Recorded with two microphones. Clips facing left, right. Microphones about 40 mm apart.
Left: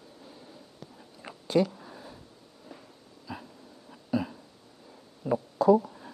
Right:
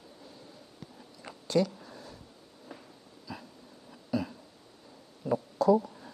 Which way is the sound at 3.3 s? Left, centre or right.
Left.